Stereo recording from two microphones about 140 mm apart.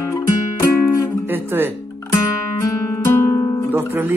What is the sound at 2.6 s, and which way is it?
Guitar, 20° left (ahead or behind).